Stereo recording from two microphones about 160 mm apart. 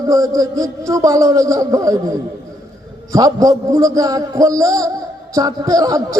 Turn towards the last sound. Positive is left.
turn(degrees=-20)  # may be behind; listen again after turning